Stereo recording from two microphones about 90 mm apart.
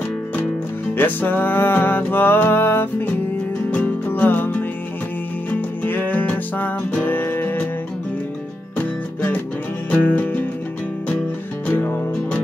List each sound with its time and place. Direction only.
0.9 s music: 20° left (ahead or behind)
9.9 s music: 20° left (ahead or behind)